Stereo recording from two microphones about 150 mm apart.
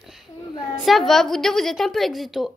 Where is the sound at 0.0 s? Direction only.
Centre (ahead or behind).